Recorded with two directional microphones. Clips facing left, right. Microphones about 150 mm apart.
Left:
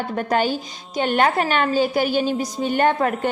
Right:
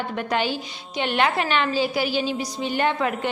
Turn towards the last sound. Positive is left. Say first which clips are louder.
# left 4 dB
turn(degrees=45)  # may be behind; listen again after turning